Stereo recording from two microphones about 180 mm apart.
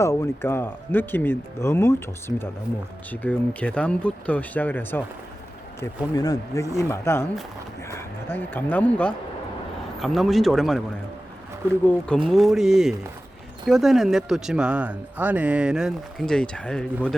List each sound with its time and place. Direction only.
0.0 s speech: 15° left (ahead or behind)
6.1 s speech: 20° left (ahead or behind); by 10.8 s centre (ahead or behind)
11.9 s speech: 5° left (ahead or behind)